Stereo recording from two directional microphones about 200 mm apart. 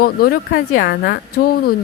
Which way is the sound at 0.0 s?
50° left (ahead or behind).